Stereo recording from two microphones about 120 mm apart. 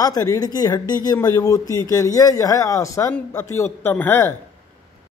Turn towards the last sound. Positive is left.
turn(degrees=20)  # may be behind; listen again after turning